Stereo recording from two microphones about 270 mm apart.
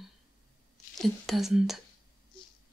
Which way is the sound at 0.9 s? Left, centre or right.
Centre.